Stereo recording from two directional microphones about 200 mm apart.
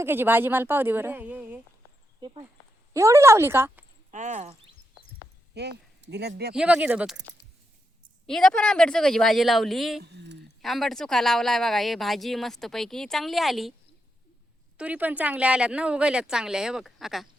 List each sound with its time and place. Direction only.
0.0 s speech: 10° right (ahead or behind)
2.9 s speech: 15° right (ahead or behind)
4.1 s speech: 35° right (ahead or behind)
5.5 s speech: 55° right (ahead or behind)
6.5 s a woman's voice: 5° right (ahead or behind)
8.3 s a woman's voice: 5° left (ahead or behind)
10.0 s speech: 60° right (ahead or behind)
10.6 s a woman's voice: centre (ahead or behind)
14.8 s a woman's voice: 10° right (ahead or behind)